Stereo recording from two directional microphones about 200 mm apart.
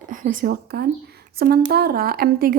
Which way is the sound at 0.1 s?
40° right (ahead or behind).